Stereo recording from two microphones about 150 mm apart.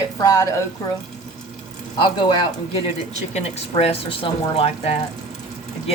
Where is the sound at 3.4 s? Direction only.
45° left (ahead or behind).